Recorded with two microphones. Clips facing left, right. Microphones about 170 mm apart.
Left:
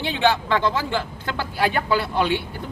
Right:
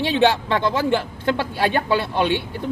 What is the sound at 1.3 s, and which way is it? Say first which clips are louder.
Speech: left 3 dB; 25° right (ahead or behind).